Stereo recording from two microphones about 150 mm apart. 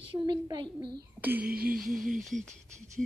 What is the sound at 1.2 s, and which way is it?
Speech, 10° right (ahead or behind).